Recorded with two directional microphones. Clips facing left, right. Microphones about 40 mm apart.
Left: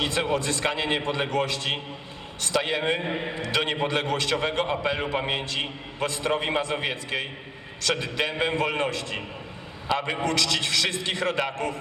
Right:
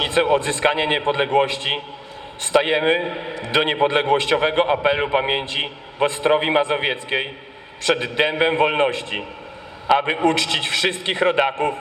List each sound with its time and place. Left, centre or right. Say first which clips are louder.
0.0 s a man's voice: right 7 dB; right